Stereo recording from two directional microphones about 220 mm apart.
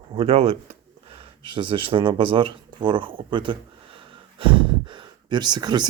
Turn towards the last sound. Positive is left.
turn(degrees=-20)  # may be behind; listen again after turning